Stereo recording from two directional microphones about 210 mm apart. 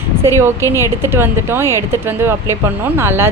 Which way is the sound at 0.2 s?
10° right (ahead or behind).